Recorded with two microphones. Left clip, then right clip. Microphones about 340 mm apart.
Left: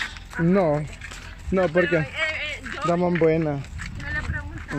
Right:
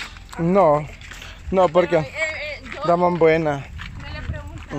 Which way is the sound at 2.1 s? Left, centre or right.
Centre.